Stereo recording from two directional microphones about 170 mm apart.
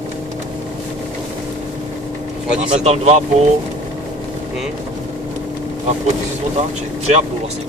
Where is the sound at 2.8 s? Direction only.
40° right (ahead or behind).